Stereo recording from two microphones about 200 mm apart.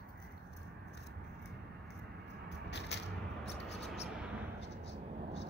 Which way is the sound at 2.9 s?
60° left (ahead or behind).